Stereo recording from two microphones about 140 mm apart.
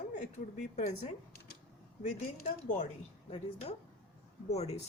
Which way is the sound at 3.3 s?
45° left (ahead or behind).